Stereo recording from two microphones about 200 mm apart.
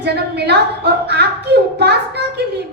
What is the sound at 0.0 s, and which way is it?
A woman's voice, 55° right (ahead or behind).